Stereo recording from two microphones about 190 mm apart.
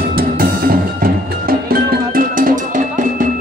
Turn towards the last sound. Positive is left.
turn(degrees=-45)  # may be behind; listen again after turning